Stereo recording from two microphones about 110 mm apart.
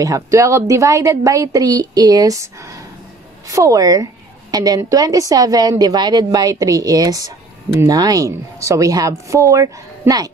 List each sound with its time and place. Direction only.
0.0 s a woman's voice: 30° right (ahead or behind)